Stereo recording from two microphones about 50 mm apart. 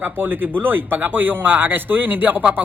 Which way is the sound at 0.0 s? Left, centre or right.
Right.